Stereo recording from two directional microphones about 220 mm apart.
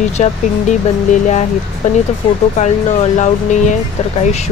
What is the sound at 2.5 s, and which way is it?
Speech, 30° left (ahead or behind).